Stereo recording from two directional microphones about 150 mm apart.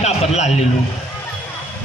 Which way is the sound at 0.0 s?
45° left (ahead or behind).